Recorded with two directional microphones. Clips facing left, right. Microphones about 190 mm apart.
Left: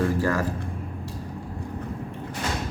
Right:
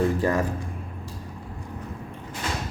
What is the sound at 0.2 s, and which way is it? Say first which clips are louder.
Speech: right 1 dB; 20° right (ahead or behind).